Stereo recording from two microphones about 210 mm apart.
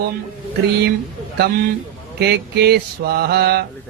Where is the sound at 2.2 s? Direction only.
50° right (ahead or behind).